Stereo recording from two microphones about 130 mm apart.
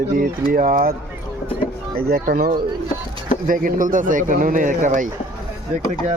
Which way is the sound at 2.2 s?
90° right.